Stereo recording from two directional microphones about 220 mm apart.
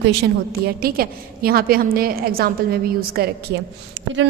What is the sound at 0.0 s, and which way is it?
A woman's voice, 50° right (ahead or behind).